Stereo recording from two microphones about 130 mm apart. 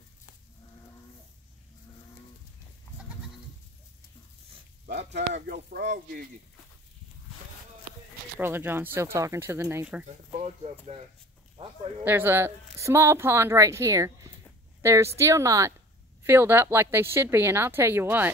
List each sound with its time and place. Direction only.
5.5 s speech: 85° right
8.4 s a woman's voice: 15° right (ahead or behind)
10.0 s speech: 55° right (ahead or behind)
12.0 s a woman's voice: 15° right (ahead or behind)